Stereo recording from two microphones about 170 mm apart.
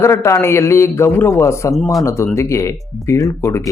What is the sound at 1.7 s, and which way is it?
Speech, centre (ahead or behind).